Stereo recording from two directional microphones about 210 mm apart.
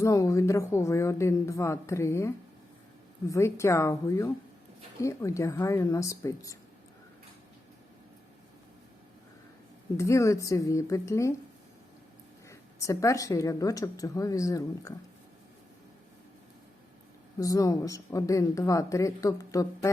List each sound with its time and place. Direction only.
0.0 s speech: 15° left (ahead or behind)
10.0 s speech: 15° left (ahead or behind)
12.5 s speech: 15° left (ahead or behind)
17.4 s speech: 15° left (ahead or behind)